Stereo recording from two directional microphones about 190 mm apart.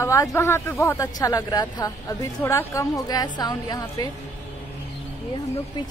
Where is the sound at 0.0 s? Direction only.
15° left (ahead or behind).